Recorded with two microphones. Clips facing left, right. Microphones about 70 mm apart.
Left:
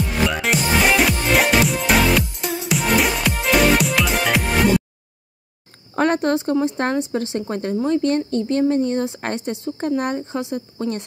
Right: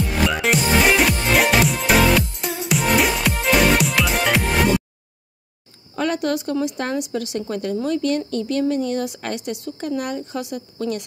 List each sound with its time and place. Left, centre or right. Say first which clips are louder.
0.0 s music: right 1 dB; centre
5.9 s a woman's voice: left 4 dB; left